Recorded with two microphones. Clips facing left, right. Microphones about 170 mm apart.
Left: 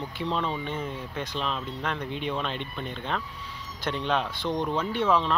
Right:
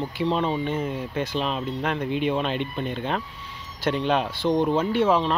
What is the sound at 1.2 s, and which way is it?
Speech, 10° right (ahead or behind).